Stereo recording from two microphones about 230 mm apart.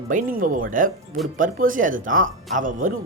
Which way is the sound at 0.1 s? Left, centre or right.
Right.